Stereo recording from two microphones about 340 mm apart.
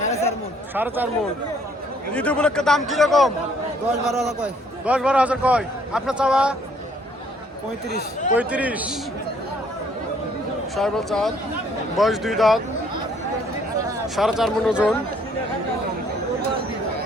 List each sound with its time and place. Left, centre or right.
0.0 s a sound: centre
0.7 s a man's voice: centre
2.1 s a man's voice: centre
7.9 s speech: left
8.4 s a man's voice: centre
10.8 s a man's voice: centre
14.2 s a man's voice: centre